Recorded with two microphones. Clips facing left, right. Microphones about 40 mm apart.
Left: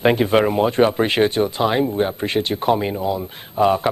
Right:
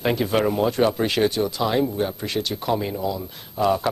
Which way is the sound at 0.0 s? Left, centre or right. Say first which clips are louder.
Left 5 dB; left.